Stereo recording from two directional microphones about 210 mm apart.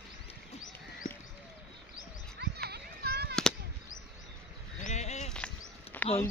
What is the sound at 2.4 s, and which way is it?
Children playing, 50° right (ahead or behind).